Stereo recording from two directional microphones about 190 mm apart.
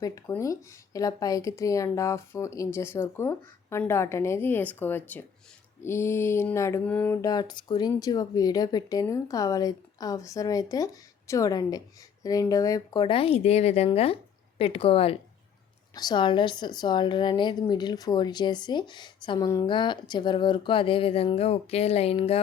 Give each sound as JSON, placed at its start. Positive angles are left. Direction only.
{"t": 0.0, "sound": "a woman's voice", "side_deg": 15}